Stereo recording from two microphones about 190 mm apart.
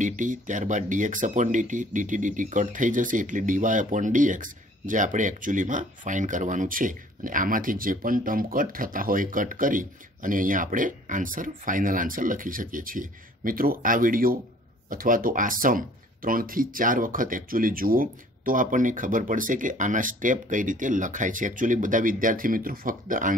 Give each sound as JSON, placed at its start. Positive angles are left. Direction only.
{"t": 0.0, "sound": "speech", "side_deg": -40}